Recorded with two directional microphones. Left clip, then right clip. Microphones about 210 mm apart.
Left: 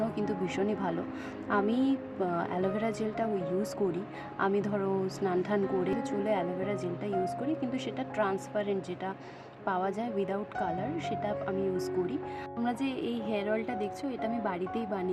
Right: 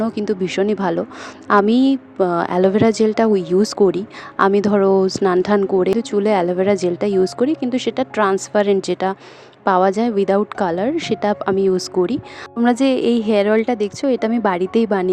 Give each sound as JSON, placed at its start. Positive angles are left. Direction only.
{"t": 0.0, "sound": "a woman's voice", "side_deg": -40}